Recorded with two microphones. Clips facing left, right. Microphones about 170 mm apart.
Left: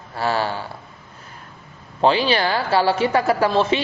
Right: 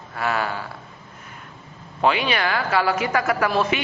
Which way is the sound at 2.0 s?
30° left (ahead or behind).